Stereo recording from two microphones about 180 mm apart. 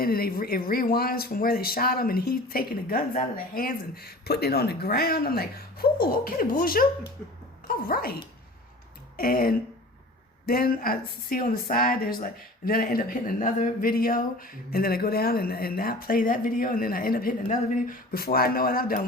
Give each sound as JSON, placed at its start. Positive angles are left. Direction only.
{"t": 0.0, "sound": "speech", "side_deg": 55}
{"t": 9.1, "sound": "speech", "side_deg": 55}